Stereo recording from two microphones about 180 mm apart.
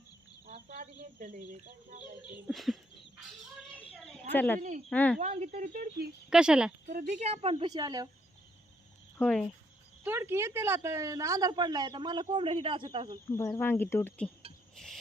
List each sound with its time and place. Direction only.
0.7 s speech: 45° right (ahead or behind)
2.5 s speech: centre (ahead or behind)
4.0 s a sound: 5° left (ahead or behind)
4.9 s speech: 5° left (ahead or behind)
5.2 s speech: 40° right (ahead or behind)
6.3 s speech: 5° right (ahead or behind)
6.8 s speech: 50° right (ahead or behind); by 8.1 s 20° right (ahead or behind)
9.1 s speech: 5° left (ahead or behind)
10.0 s a man's voice: 10° right (ahead or behind); by 13.1 s 30° right (ahead or behind)
13.2 s speech: 15° left (ahead or behind)